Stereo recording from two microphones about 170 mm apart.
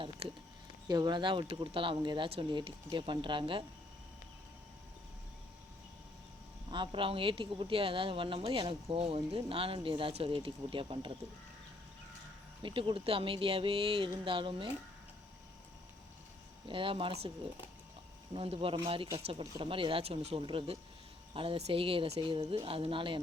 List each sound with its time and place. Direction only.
0.2 s speech: 35° right (ahead or behind)
0.9 s speech: 25° right (ahead or behind)
6.7 s speech: 30° right (ahead or behind)
12.6 s speech: 30° right (ahead or behind)
16.6 s speech: 30° right (ahead or behind)
18.3 s speech: 35° right (ahead or behind)